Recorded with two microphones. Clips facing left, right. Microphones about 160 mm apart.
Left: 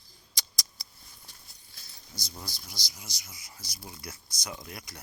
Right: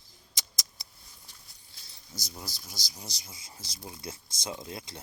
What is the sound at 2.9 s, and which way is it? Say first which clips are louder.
Speech: right 3 dB; 30° right (ahead or behind).